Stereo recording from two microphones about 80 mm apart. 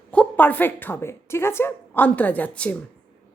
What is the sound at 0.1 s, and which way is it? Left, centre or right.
Speech, centre.